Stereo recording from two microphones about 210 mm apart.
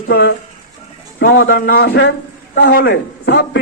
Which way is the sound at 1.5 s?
45° left (ahead or behind).